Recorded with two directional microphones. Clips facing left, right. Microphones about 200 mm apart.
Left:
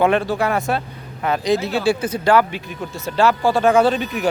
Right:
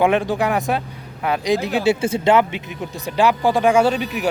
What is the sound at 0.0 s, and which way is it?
Speech, 15° right (ahead or behind).